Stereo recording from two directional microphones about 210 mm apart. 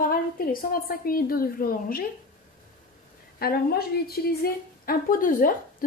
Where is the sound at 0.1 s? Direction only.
45° left (ahead or behind).